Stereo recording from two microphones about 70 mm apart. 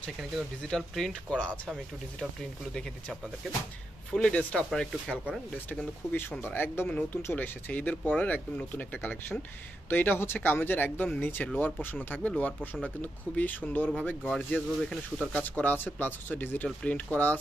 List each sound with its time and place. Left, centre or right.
0.7 s speech: centre
2.7 s speech: centre
6.0 s speech: left
6.9 s speech: left
14.3 s speech: centre
15.3 s speech: left